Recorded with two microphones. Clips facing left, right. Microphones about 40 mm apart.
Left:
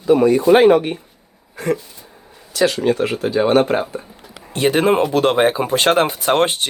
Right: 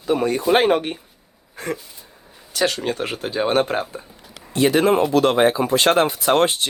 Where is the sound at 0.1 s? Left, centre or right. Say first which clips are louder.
Left 7 dB; left.